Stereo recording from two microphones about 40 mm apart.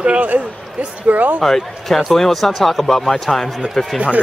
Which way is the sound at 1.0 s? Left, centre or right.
Right.